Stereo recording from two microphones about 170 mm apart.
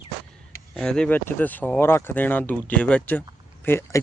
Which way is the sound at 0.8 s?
5° left (ahead or behind).